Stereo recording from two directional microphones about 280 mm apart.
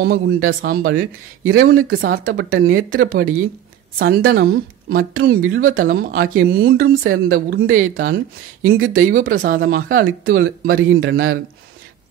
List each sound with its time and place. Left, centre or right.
0.5 s a woman's voice: right